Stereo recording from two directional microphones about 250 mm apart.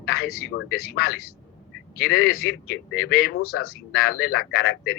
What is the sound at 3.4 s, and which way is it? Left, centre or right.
Speech, left.